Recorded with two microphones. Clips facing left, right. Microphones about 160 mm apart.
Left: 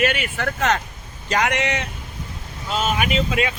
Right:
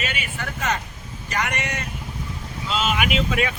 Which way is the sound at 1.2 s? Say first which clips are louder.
Left 6 dB; 90° left.